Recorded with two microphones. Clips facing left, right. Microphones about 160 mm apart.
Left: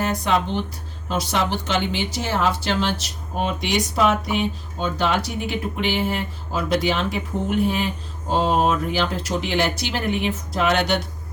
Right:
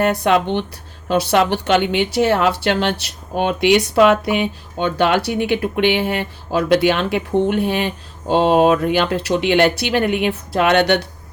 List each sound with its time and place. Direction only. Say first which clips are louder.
0.0 s speech: right 6 dB; 65° right (ahead or behind)